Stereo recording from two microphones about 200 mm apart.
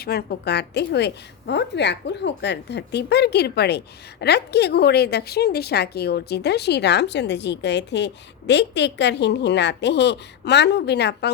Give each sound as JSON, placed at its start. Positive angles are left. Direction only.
{"t": 0.0, "sound": "a woman's voice", "side_deg": 50}